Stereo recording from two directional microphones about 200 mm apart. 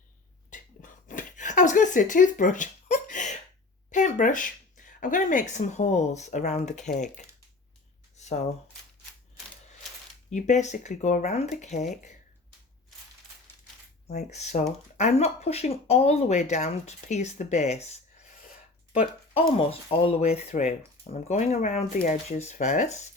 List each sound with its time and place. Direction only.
0.5 s a sound: 40° left (ahead or behind)
3.9 s speech: 40° left (ahead or behind)
8.1 s shuffling cards: 35° left (ahead or behind)
10.2 s speech: 35° left (ahead or behind)
14.1 s speech: 35° left (ahead or behind)
19.5 s speech: 30° left (ahead or behind)